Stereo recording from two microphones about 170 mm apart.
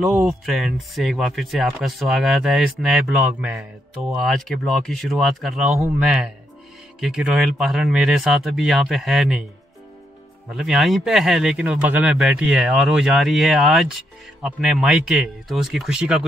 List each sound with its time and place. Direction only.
0.0 s speech: 5° right (ahead or behind)
10.5 s speech: 5° right (ahead or behind)